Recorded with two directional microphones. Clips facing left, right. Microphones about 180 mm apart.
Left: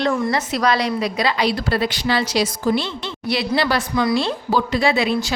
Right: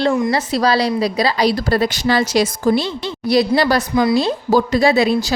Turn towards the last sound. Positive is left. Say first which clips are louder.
# right 4 dB
turn(degrees=-40)  # may be behind; listen again after turning